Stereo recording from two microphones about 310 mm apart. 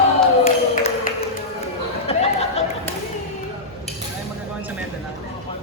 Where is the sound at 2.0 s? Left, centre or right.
Centre.